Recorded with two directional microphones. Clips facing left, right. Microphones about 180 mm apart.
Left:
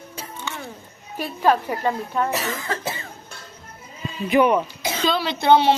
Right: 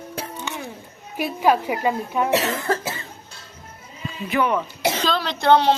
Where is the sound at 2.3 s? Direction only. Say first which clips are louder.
Right 5 dB; 75° right (ahead or behind).